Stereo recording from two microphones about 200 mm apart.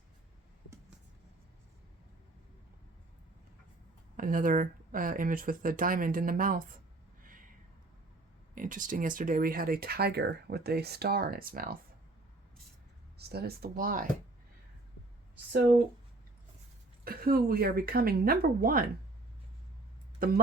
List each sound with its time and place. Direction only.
4.2 s speech: 45° right (ahead or behind)
8.5 s speech: 40° right (ahead or behind)
13.1 s speech: 50° right (ahead or behind)
17.0 s speech: 45° right (ahead or behind)
20.1 s speech: 50° right (ahead or behind)